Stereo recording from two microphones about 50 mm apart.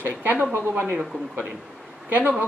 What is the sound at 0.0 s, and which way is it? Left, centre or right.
Speech, right.